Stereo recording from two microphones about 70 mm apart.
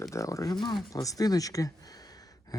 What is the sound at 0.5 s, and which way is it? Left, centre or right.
Speech, left.